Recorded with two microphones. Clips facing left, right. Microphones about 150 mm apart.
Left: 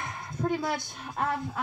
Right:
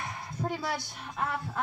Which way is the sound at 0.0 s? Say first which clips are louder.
Left 3 dB; 50° left (ahead or behind).